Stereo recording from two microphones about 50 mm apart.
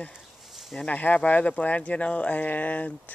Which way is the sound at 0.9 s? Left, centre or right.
Left.